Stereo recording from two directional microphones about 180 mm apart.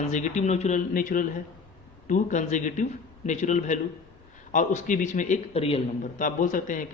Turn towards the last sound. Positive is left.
turn(degrees=45)  # may be behind; listen again after turning